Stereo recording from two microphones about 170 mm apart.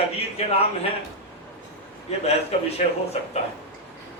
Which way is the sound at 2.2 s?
40° left (ahead or behind).